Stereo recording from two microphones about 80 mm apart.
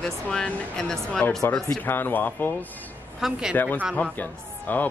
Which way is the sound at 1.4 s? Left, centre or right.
Left.